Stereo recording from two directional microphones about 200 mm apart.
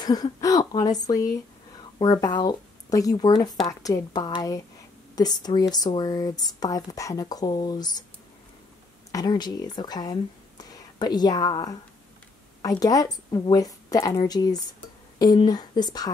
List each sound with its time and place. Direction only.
0.0 s a woman's voice: 20° left (ahead or behind)
9.1 s speech: 20° left (ahead or behind)